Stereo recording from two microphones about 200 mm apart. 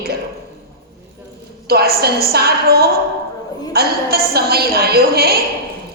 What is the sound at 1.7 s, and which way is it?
A woman's voice, 50° right (ahead or behind).